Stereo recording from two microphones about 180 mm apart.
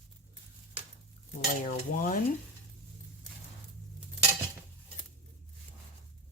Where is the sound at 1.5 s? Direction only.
50° left (ahead or behind).